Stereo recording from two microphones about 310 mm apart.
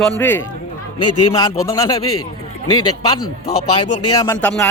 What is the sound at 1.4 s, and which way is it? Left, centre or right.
Speech, centre.